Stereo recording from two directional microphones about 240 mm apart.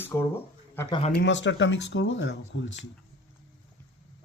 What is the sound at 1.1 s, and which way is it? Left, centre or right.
Speech, left.